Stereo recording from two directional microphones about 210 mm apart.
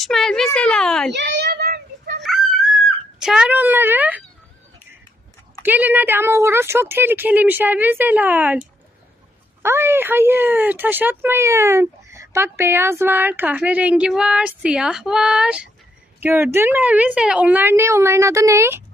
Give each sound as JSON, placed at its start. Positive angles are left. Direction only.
{"t": 0.0, "sound": "a woman's voice", "side_deg": 0}
{"t": 1.1, "sound": "a child's voice", "side_deg": -55}
{"t": 1.5, "sound": "child singing", "side_deg": -45}
{"t": 2.3, "sound": "dog", "side_deg": 0}
{"t": 2.8, "sound": "speech", "side_deg": -5}
{"t": 5.6, "sound": "speech", "side_deg": -10}
{"t": 9.6, "sound": "speech", "side_deg": -10}